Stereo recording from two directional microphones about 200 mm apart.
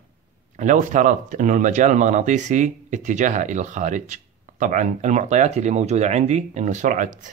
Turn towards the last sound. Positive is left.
turn(degrees=-40)  # may be behind; listen again after turning